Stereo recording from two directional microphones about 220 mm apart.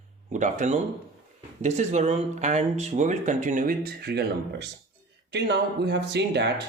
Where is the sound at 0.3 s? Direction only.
35° right (ahead or behind).